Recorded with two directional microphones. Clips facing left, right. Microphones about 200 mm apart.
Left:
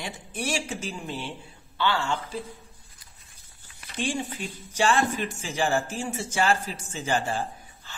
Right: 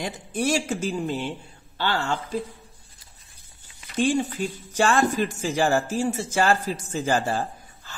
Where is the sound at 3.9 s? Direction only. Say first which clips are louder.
Right 7 dB; 40° right (ahead or behind).